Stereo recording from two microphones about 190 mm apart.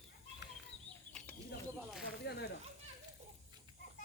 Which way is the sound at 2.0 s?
60° left (ahead or behind).